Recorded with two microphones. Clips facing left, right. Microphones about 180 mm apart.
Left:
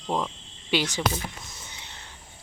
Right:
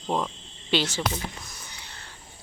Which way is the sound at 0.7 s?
15° left (ahead or behind).